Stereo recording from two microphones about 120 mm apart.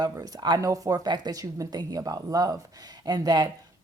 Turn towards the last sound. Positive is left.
turn(degrees=-35)  # may be behind; listen again after turning